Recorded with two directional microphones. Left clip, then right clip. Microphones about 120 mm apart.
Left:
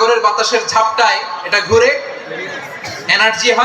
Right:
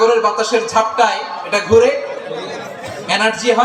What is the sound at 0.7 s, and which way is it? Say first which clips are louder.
A man's voice: left 3 dB; 15° right (ahead or behind).